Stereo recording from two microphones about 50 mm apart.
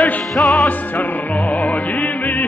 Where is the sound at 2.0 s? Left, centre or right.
Left.